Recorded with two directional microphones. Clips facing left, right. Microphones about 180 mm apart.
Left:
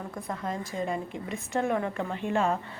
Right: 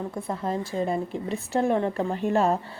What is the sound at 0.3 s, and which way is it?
A woman's voice, 30° right (ahead or behind).